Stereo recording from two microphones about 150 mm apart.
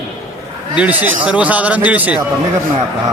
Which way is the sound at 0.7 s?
10° right (ahead or behind).